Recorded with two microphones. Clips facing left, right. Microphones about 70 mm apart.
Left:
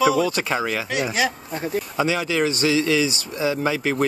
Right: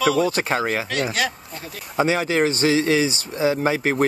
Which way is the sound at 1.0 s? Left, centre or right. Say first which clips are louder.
Left 1 dB; centre.